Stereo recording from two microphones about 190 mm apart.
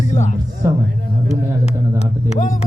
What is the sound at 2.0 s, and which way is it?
Speech, 40° left (ahead or behind).